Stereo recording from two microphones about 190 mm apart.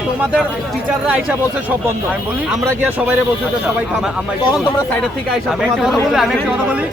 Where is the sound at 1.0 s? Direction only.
5° right (ahead or behind).